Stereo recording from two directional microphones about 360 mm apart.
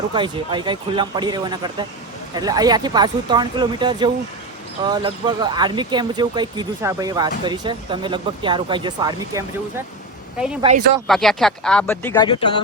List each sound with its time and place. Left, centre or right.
0.1 s speech: centre
11.0 s speech: centre